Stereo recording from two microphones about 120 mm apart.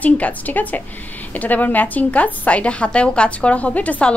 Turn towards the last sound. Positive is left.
turn(degrees=10)  # may be behind; listen again after turning